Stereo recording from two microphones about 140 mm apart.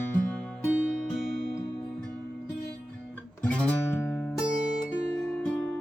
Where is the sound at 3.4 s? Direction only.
10° left (ahead or behind).